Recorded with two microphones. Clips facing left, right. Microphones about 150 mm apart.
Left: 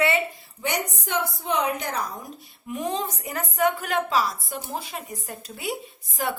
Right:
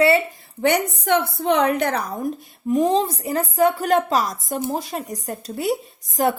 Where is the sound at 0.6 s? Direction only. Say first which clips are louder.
Right 9 dB; 65° right (ahead or behind).